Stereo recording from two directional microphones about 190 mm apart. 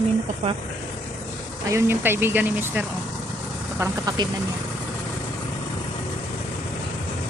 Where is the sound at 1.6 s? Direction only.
15° right (ahead or behind).